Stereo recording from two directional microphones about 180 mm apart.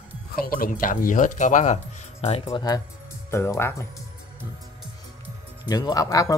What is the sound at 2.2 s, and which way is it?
Speech, 30° left (ahead or behind).